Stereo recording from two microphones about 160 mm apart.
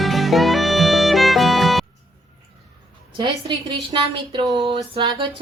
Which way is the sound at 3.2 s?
25° right (ahead or behind).